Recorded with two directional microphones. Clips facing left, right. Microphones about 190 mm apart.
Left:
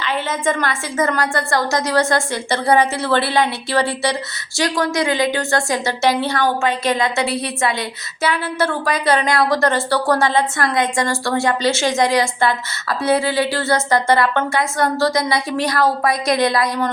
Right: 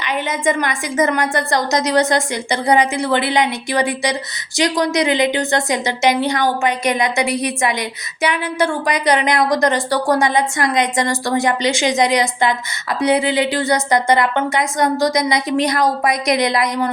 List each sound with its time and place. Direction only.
0.0 s a woman's voice: 15° right (ahead or behind)